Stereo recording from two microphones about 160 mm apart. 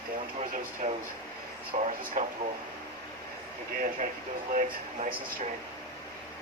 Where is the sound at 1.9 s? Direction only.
50° right (ahead or behind).